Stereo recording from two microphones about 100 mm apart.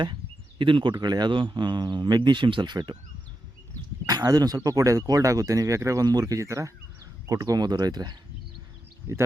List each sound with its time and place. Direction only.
0.6 s speech: 55° right (ahead or behind)
0.9 s speech: 45° right (ahead or behind)
4.0 s speech: 40° right (ahead or behind)